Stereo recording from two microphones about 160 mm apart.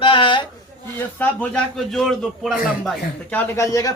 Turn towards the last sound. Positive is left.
turn(degrees=20)  # may be behind; listen again after turning